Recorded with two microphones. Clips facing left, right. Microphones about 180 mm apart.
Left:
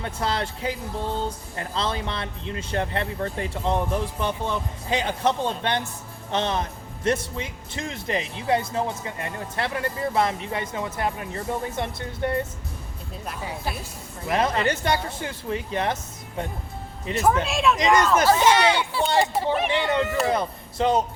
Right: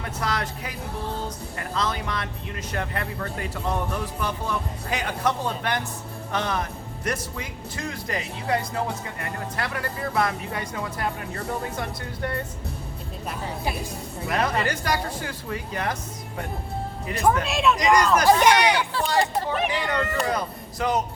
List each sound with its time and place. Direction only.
0.0 s speech: 30° left (ahead or behind)
14.3 s speech: 25° left (ahead or behind)
17.1 s speech: 25° left (ahead or behind)
17.4 s speech: centre (ahead or behind)
18.3 s speech: 15° right (ahead or behind)
19.2 s speech: centre (ahead or behind)
19.7 s speech: 25° left (ahead or behind)